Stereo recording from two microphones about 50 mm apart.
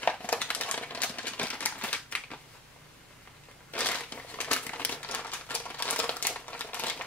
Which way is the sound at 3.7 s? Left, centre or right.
Left.